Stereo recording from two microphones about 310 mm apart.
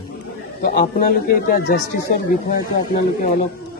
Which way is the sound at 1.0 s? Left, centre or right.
Left.